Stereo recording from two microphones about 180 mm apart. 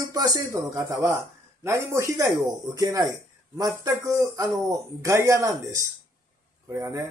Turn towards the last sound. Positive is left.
turn(degrees=-15)  # may be behind; listen again after turning